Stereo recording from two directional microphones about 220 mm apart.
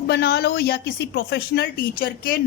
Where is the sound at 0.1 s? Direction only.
45° left (ahead or behind).